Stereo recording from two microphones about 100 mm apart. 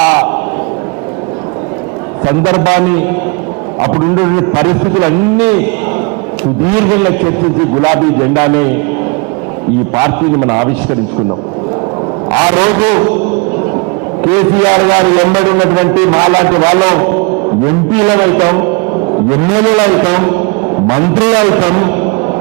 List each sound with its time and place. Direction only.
0.0 s a sound: 25° right (ahead or behind)
2.2 s a man's voice: 25° right (ahead or behind)
6.7 s a man's voice: 25° right (ahead or behind)
9.9 s a man's voice: 25° right (ahead or behind)
12.3 s a man's voice: 20° right (ahead or behind)
14.2 s a man's voice: 25° right (ahead or behind)